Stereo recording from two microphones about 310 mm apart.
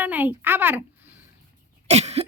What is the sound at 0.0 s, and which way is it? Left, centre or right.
Speech, centre.